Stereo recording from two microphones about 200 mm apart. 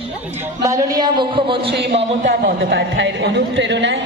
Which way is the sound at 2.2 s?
60° right (ahead or behind).